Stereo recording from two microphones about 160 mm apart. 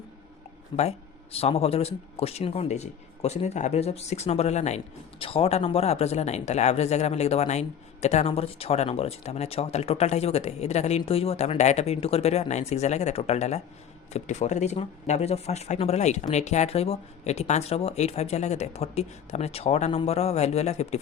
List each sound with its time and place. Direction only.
0.8 s speech: 40° left (ahead or behind)